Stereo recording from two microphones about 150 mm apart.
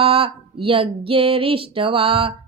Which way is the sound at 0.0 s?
40° right (ahead or behind).